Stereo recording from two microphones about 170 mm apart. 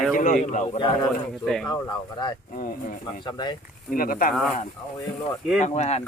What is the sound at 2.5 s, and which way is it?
Speech, 55° left (ahead or behind).